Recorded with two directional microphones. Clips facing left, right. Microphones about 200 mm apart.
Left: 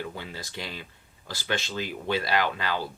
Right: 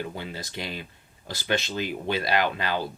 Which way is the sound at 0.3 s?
20° right (ahead or behind).